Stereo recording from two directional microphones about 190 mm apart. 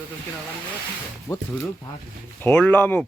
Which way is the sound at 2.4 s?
5° left (ahead or behind).